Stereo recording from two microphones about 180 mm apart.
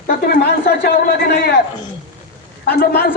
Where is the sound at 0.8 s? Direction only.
60° left (ahead or behind).